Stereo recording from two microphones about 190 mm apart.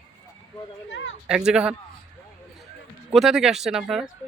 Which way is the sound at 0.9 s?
75° left (ahead or behind).